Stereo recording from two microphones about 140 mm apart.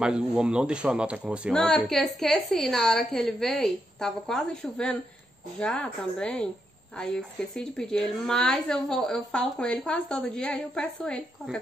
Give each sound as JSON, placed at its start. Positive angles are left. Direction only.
{"t": 0.0, "sound": "speech", "side_deg": -5}
{"t": 1.5, "sound": "speech", "side_deg": 5}